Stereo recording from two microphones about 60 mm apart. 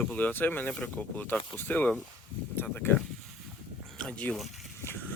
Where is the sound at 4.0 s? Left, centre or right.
Left.